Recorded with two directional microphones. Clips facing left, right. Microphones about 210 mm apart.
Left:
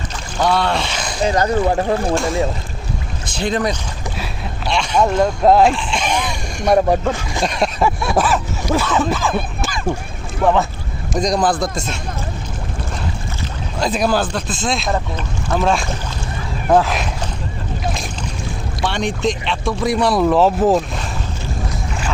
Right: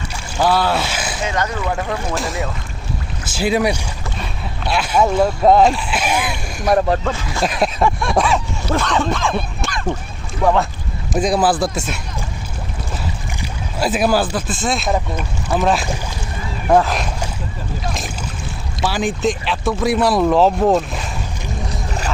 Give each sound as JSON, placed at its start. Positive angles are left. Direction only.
{"t": 0.3, "sound": "speech", "side_deg": -5}
{"t": 1.2, "sound": "speech", "side_deg": 35}
{"t": 3.3, "sound": "speech", "side_deg": -10}
{"t": 6.8, "sound": "speech", "side_deg": 10}
{"t": 7.4, "sound": "speech", "side_deg": 0}
{"t": 13.7, "sound": "speech", "side_deg": -5}
{"t": 18.9, "sound": "speech", "side_deg": -5}